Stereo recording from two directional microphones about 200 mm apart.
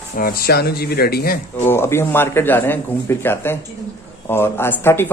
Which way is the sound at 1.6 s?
10° left (ahead or behind).